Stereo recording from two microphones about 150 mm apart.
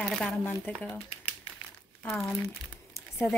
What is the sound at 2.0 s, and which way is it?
Speech, centre (ahead or behind).